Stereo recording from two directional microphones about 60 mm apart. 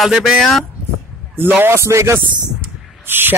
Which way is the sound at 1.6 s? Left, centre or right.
Right.